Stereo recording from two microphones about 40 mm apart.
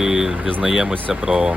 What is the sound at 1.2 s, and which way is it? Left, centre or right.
Speech, right.